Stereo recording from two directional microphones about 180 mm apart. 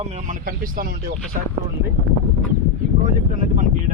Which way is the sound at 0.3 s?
50° right (ahead or behind).